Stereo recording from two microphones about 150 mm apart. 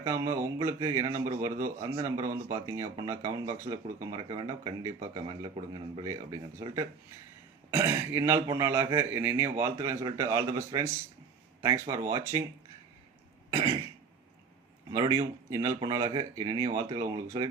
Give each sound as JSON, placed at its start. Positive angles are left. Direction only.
{"t": 0.0, "sound": "a man's voice", "side_deg": -20}
{"t": 4.1, "sound": "a man's voice", "side_deg": -35}
{"t": 14.8, "sound": "a man's voice", "side_deg": -25}